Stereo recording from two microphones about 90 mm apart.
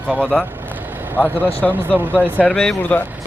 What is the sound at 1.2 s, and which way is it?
Speech, 15° left (ahead or behind).